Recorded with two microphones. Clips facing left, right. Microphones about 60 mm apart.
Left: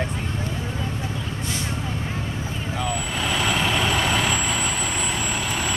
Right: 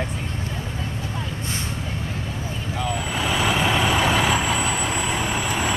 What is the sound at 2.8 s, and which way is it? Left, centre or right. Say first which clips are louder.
Vehicle: right 2 dB; centre.